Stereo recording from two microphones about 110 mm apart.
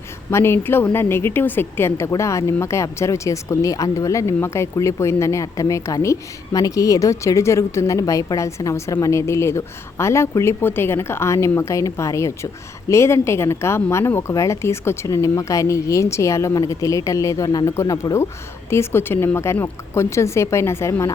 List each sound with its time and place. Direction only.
0.3 s a woman's voice: 25° left (ahead or behind)